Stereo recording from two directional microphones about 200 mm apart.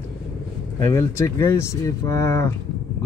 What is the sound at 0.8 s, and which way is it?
Speech, 15° left (ahead or behind).